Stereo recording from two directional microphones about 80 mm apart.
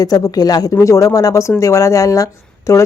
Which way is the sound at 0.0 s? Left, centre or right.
Left.